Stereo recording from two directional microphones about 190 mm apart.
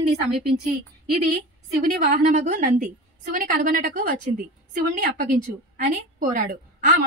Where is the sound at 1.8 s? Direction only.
45° right (ahead or behind).